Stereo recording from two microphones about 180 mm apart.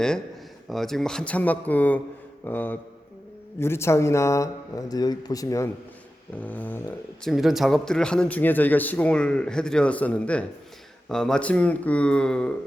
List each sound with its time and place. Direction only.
0.7 s speech: centre (ahead or behind)
7.3 s a man's voice: centre (ahead or behind)